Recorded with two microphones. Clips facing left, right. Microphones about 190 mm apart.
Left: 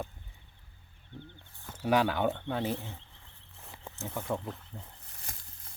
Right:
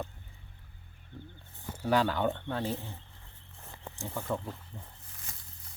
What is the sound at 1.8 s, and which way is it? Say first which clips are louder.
Speech: left 1 dB; 15° left (ahead or behind).